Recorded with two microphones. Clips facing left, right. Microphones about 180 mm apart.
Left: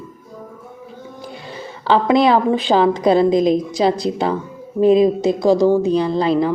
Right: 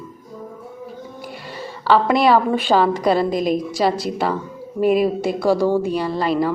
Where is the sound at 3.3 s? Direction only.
5° right (ahead or behind).